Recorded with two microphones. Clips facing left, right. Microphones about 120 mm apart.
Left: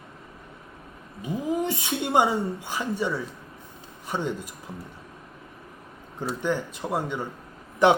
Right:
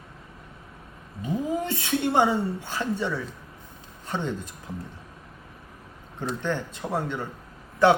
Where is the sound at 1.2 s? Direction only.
15° left (ahead or behind).